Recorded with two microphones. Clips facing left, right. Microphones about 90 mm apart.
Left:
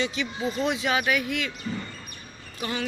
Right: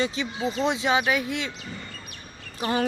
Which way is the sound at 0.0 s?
30° right (ahead or behind).